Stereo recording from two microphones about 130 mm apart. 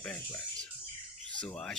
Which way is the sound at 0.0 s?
15° left (ahead or behind).